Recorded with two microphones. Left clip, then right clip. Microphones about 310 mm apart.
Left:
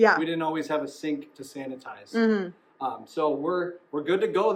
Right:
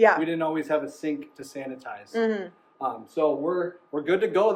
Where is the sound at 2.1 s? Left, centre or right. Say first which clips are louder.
Left 1 dB; left.